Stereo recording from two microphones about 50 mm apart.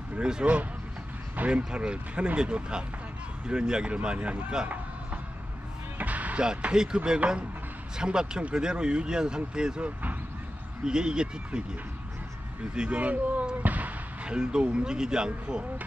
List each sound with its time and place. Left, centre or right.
0.2 s speech: centre
5.9 s music: right
6.4 s speech: centre
8.0 s speech: centre
10.8 s speech: centre
12.7 s speech: centre
13.6 s basketball bounce: right
14.2 s speech: centre